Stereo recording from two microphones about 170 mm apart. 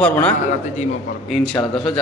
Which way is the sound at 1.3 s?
Centre (ahead or behind).